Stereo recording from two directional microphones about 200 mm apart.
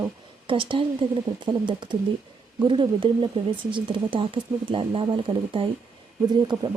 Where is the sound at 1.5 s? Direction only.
25° right (ahead or behind).